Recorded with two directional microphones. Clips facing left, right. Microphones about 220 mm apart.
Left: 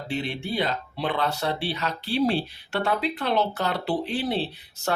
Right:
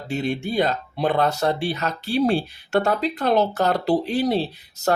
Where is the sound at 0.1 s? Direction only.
45° right (ahead or behind).